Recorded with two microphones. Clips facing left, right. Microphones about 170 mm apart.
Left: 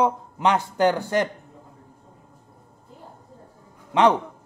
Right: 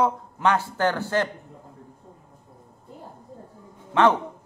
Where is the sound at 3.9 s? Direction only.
15° left (ahead or behind).